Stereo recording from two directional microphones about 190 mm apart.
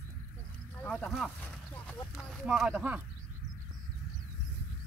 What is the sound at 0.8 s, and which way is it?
Speech, 5° left (ahead or behind).